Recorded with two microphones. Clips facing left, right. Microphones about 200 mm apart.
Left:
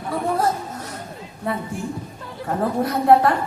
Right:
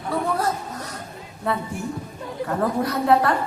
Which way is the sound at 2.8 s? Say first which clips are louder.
Left 5 dB; 25° left (ahead or behind).